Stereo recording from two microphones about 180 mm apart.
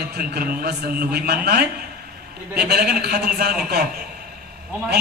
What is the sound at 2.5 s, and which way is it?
A man's voice, 60° right (ahead or behind).